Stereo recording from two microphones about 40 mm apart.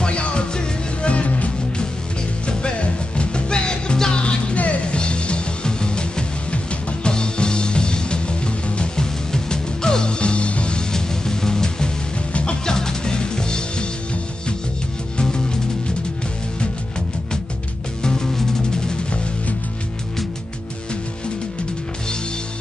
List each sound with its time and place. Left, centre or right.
0.0 s music: left
10.9 s music: centre
15.1 s music: centre
18.0 s music: centre